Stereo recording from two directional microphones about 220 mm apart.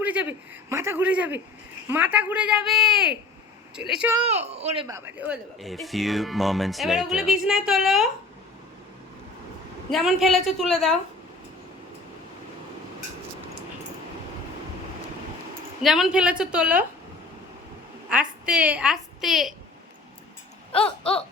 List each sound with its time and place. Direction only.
0.0 s a man's voice: 5° right (ahead or behind)
4.5 s speech: 25° right (ahead or behind)
4.9 s speech: 10° right (ahead or behind)
9.9 s speech: centre (ahead or behind)
15.8 s speech: centre (ahead or behind)
18.1 s a woman's voice: 5° right (ahead or behind)
20.7 s a sound: 25° left (ahead or behind)